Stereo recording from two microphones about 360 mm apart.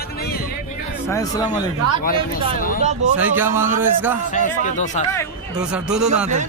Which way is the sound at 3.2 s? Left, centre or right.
Centre.